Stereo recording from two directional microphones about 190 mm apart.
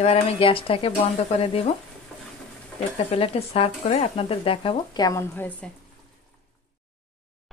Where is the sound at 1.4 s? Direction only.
30° left (ahead or behind).